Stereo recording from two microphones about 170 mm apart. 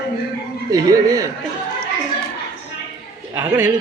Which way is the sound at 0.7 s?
20° right (ahead or behind).